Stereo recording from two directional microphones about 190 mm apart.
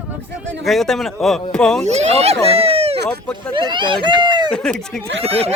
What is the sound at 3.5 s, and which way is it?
Speech, 25° right (ahead or behind).